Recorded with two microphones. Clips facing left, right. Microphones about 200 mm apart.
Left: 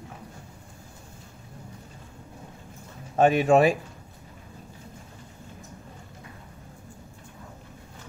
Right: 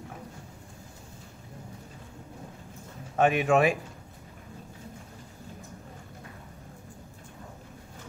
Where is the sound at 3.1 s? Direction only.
35° left (ahead or behind).